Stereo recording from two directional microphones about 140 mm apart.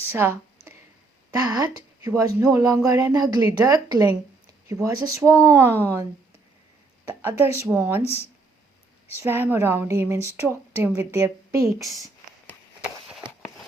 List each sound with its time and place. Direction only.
0.1 s speech: 15° right (ahead or behind)
1.3 s speech: 25° right (ahead or behind)
7.1 s speech: 15° right (ahead or behind)
9.2 s speech: 15° right (ahead or behind)